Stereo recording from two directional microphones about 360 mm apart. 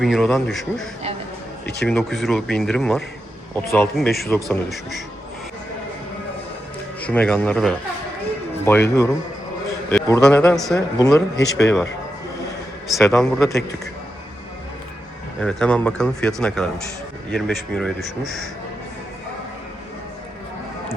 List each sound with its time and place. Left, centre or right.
0.0 s speech: centre
7.0 s a man's voice: centre
9.9 s speech: centre
12.9 s speech: centre
15.4 s speech: centre